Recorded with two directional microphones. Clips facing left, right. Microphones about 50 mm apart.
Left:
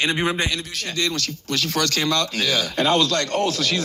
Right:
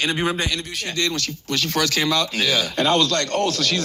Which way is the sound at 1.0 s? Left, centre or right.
Centre.